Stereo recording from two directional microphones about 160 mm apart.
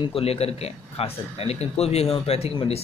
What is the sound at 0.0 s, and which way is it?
Speech, 35° left (ahead or behind).